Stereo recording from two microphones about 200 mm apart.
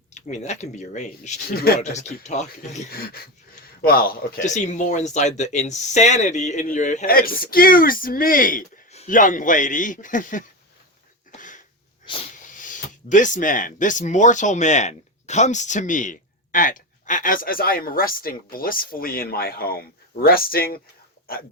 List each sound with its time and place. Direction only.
0.1 s speech: 35° left (ahead or behind)
1.5 s speech: 50° left (ahead or behind)
2.9 s speech: 50° left (ahead or behind)
11.3 s a sound: 40° left (ahead or behind)
12.1 s hiss: 25° left (ahead or behind)
12.5 s speech: 40° left (ahead or behind)